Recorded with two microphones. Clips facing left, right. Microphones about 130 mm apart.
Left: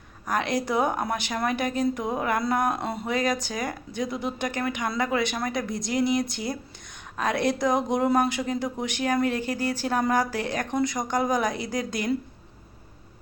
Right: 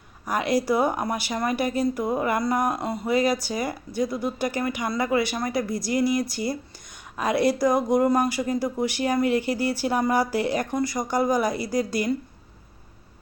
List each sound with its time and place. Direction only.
0.3 s a woman's voice: 5° right (ahead or behind)